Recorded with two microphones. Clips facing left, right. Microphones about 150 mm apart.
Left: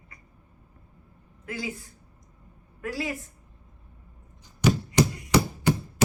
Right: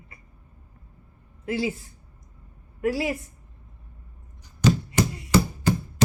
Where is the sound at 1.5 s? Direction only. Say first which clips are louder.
Right 7 dB; 25° right (ahead or behind).